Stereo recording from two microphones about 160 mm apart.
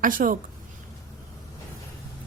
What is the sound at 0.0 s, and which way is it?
Speech, 60° right (ahead or behind).